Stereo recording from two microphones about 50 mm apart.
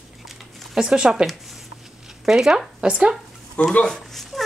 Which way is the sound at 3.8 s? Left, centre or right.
Centre.